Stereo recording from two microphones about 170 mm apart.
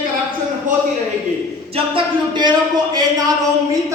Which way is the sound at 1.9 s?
25° right (ahead or behind).